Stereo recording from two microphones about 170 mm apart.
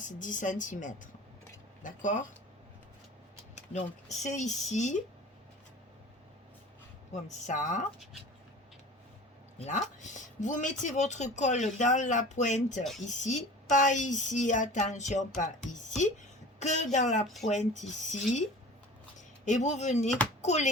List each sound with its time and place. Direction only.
0.0 s speech: 50° left (ahead or behind)
3.7 s speech: 45° left (ahead or behind)
7.3 s speech: 45° left (ahead or behind)
9.6 s speech: 45° left (ahead or behind)
19.5 s speech: 45° left (ahead or behind)